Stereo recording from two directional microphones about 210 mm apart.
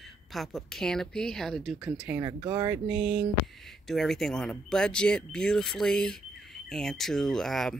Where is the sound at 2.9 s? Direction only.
5° right (ahead or behind).